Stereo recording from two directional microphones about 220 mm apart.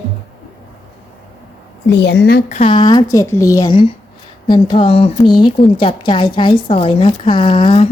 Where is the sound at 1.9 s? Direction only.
50° left (ahead or behind).